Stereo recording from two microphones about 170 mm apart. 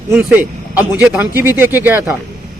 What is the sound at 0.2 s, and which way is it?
Speech, 10° right (ahead or behind).